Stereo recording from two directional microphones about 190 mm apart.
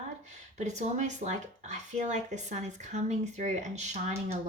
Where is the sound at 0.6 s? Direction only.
40° right (ahead or behind).